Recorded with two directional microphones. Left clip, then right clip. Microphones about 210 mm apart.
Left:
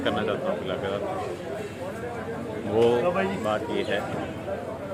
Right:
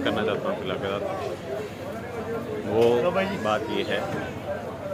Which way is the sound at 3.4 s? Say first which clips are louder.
Right 1 dB; 5° right (ahead or behind).